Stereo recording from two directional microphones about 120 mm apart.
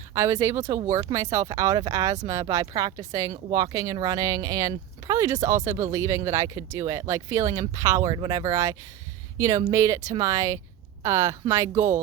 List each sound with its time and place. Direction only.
0.1 s speech: 25° right (ahead or behind)